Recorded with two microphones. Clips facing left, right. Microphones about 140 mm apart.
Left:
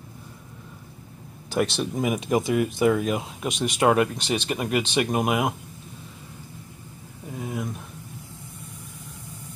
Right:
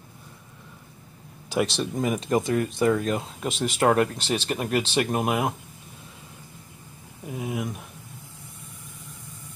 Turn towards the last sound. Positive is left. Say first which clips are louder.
# right 1 dB
turn(degrees=-15)  # may be behind; listen again after turning